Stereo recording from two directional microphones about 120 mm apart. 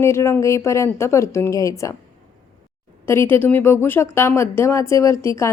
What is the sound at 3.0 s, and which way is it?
Speech, 20° left (ahead or behind).